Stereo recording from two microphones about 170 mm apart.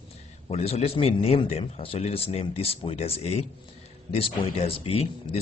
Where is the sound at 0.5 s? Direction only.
40° left (ahead or behind).